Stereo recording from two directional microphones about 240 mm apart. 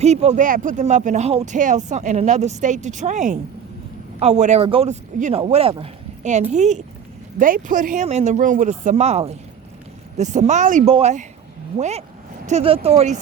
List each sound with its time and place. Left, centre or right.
0.0 s speech: right